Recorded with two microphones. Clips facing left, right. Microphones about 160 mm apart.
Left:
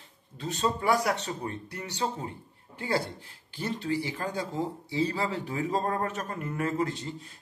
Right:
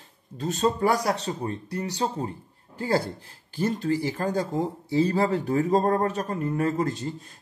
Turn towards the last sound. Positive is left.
turn(degrees=-40)  # may be behind; listen again after turning